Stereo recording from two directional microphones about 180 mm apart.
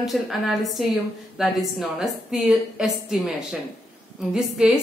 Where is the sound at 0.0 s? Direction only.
Centre (ahead or behind).